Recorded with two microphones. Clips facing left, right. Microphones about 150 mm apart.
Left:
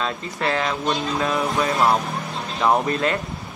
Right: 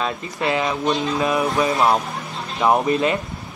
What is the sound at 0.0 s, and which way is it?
Speech, 15° right (ahead or behind).